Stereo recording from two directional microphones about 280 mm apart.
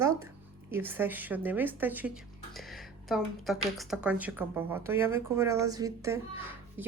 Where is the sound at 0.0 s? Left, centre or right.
Centre.